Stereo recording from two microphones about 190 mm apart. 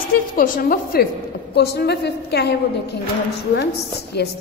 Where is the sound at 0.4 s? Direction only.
50° left (ahead or behind).